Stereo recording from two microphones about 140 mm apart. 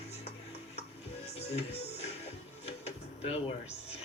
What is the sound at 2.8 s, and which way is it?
Drawer open or close, 45° left (ahead or behind).